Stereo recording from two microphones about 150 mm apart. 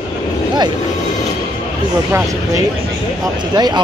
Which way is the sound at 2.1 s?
15° right (ahead or behind).